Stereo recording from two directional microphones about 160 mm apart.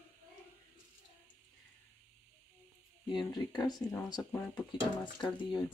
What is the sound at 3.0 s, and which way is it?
Speech, 25° left (ahead or behind).